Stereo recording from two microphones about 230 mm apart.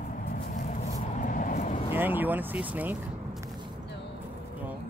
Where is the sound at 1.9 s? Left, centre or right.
Centre.